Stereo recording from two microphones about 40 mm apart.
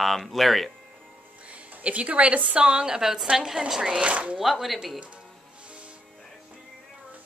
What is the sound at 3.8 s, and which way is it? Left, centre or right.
Speech, right.